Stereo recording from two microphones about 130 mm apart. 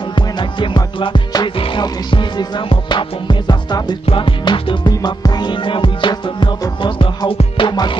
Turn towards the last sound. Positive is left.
turn(degrees=35)  # may be behind; listen again after turning